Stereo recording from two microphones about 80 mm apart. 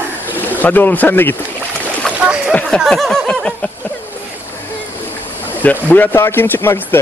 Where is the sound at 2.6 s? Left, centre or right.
Centre.